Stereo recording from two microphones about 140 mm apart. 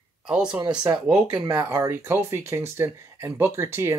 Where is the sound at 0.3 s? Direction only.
5° right (ahead or behind).